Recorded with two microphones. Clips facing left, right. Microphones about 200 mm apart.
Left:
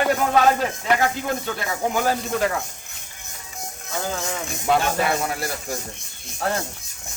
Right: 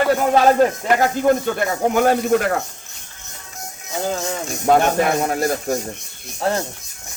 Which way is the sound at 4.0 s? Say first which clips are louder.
Right 4 dB; 35° right (ahead or behind).